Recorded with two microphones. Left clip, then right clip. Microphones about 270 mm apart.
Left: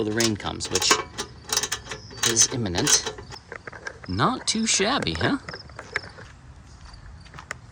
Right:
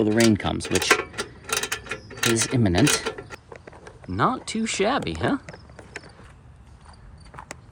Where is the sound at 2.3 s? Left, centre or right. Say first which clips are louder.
Left 2 dB; right.